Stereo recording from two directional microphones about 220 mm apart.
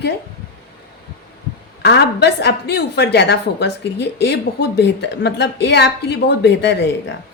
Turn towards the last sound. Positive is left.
turn(degrees=50)  # may be behind; listen again after turning